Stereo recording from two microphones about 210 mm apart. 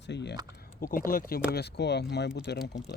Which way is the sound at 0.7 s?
45° left (ahead or behind).